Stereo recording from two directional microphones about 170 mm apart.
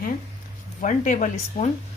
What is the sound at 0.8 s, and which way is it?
Speech, 50° left (ahead or behind).